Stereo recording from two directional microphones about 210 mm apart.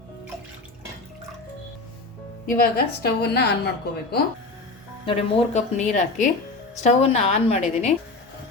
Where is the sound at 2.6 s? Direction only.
45° left (ahead or behind).